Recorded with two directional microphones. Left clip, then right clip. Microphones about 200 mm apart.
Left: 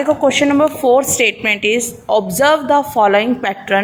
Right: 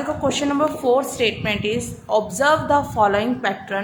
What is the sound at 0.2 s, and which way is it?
A woman's voice, 25° left (ahead or behind).